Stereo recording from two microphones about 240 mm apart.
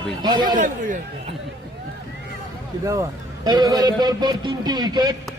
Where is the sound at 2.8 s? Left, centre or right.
Centre.